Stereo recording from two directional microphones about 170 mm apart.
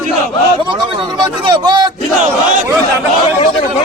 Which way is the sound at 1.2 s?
25° right (ahead or behind).